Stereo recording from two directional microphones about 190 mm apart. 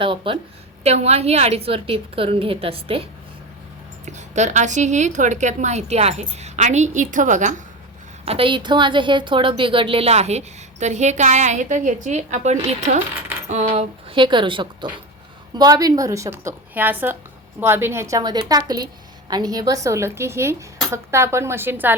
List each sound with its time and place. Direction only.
0.0 s a woman's voice: 25° right (ahead or behind)
8.2 s a woman's voice: 30° right (ahead or behind); by 21.9 s 10° right (ahead or behind)